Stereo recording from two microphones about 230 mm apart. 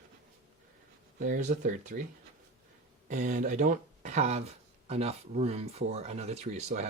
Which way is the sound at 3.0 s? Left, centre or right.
Right.